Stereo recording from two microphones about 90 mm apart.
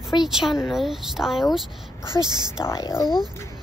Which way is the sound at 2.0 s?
50° right (ahead or behind).